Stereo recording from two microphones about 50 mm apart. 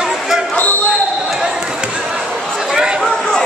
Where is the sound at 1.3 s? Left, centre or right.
Centre.